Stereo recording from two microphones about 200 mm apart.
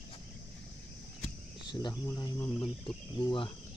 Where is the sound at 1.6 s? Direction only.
20° left (ahead or behind).